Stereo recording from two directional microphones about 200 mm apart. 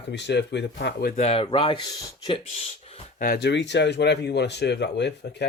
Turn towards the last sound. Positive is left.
turn(degrees=60)  # may be behind; listen again after turning